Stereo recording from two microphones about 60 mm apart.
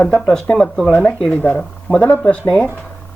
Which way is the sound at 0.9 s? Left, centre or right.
Left.